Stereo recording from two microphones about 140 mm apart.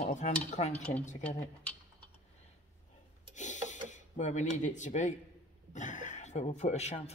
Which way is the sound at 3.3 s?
60° left (ahead or behind).